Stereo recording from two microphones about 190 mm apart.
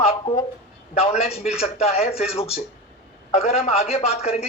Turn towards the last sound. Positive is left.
turn(degrees=35)  # may be behind; listen again after turning